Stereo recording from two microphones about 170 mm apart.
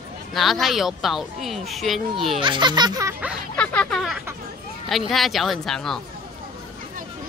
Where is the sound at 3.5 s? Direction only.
10° left (ahead or behind).